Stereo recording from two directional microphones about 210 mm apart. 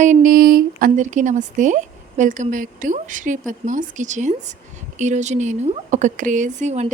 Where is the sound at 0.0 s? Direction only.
40° right (ahead or behind).